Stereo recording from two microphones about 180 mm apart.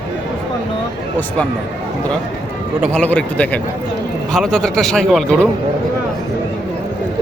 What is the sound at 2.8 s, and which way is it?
A man's voice, 10° left (ahead or behind).